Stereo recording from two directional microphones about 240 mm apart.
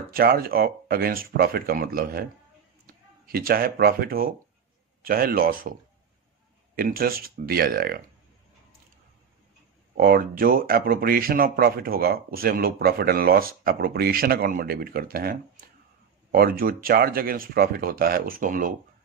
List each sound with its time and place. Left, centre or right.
0.1 s speech: right
3.3 s speech: right
9.9 s speech: right